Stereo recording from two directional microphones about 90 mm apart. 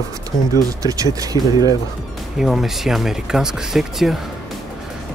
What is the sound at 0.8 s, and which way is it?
Speech, 40° right (ahead or behind).